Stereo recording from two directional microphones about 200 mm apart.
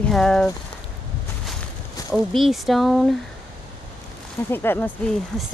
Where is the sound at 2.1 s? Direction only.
Centre (ahead or behind).